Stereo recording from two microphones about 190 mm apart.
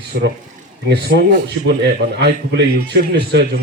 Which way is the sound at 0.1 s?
60° right (ahead or behind).